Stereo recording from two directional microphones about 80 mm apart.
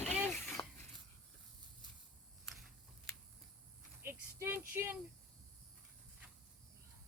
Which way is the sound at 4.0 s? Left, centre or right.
Right.